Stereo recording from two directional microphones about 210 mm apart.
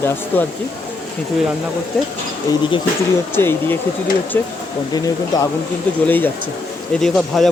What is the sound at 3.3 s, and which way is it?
Speech, 10° left (ahead or behind).